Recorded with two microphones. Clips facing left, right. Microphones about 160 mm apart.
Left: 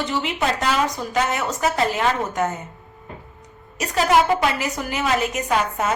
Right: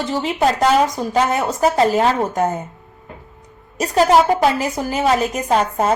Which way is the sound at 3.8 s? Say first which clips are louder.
Right 4 dB; 35° right (ahead or behind).